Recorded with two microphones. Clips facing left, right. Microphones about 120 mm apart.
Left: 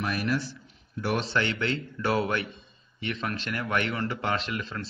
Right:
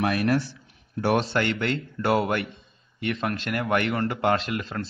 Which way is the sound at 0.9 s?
55° right (ahead or behind).